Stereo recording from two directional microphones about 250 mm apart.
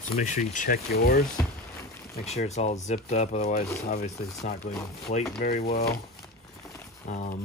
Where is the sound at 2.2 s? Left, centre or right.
Left.